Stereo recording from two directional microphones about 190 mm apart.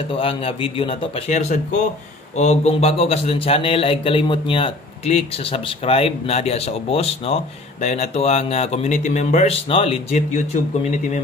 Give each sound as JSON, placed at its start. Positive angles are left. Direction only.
{"t": 0.1, "sound": "a man's voice", "side_deg": 30}